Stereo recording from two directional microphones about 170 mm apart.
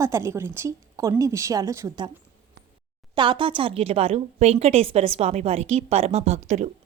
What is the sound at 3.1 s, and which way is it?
A woman's voice, 30° right (ahead or behind).